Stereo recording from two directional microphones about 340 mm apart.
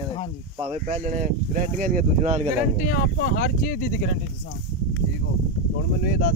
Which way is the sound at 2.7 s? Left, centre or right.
Left.